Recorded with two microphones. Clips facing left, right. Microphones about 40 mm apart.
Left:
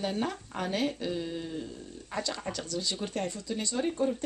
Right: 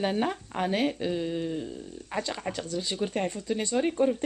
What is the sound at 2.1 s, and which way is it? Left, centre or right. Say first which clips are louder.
Speech: right 2 dB; right.